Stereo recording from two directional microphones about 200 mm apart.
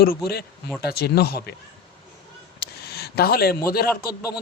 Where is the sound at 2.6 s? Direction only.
55° left (ahead or behind).